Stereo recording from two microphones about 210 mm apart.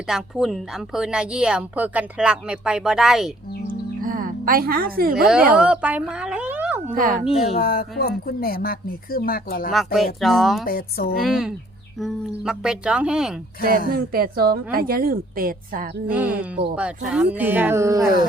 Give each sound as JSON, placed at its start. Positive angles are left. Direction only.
{"t": 0.1, "sound": "a woman's voice", "side_deg": 0}
{"t": 3.7, "sound": "music", "side_deg": -40}
{"t": 5.1, "sound": "a woman's voice", "side_deg": 0}
{"t": 6.9, "sound": "speech", "side_deg": -40}
{"t": 7.6, "sound": "speech", "side_deg": 45}
{"t": 9.7, "sound": "a woman's voice", "side_deg": 0}
{"t": 10.7, "sound": "speech", "side_deg": 45}
{"t": 11.2, "sound": "a woman's voice", "side_deg": 0}
{"t": 13.9, "sound": "a woman's voice", "side_deg": -45}
{"t": 16.0, "sound": "speech", "side_deg": -5}